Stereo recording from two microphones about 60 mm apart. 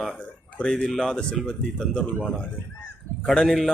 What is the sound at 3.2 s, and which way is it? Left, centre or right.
Speech, centre.